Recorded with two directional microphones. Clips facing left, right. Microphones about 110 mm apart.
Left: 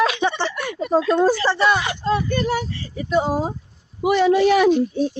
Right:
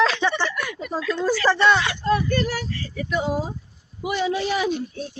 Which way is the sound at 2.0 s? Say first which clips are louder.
Left 1 dB; 20° left (ahead or behind).